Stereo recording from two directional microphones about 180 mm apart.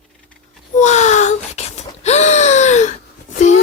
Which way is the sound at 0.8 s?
40° left (ahead or behind).